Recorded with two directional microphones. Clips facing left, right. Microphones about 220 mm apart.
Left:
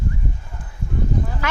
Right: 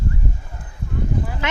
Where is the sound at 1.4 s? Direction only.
20° right (ahead or behind).